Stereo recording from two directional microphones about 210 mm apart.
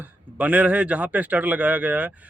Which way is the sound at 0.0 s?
5° right (ahead or behind).